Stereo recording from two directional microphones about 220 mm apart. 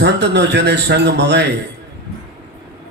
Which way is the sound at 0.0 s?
50° right (ahead or behind).